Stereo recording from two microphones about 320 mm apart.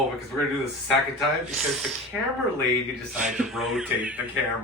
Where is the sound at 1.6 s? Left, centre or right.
Centre.